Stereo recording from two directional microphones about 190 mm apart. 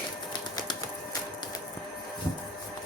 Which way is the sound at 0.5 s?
20° left (ahead or behind).